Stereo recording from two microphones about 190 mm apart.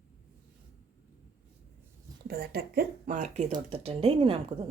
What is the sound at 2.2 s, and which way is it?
Speech, 55° right (ahead or behind).